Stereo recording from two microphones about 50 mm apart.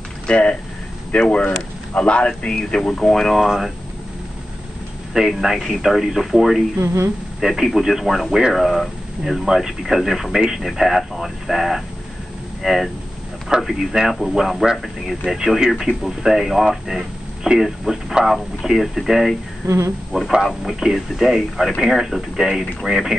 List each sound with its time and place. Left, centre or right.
0.3 s speech: centre
5.3 s speech: centre
6.8 s a woman's voice: right
7.3 s speech: centre